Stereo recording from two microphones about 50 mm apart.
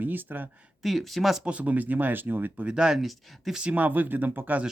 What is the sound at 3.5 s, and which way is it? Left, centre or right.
Speech, centre.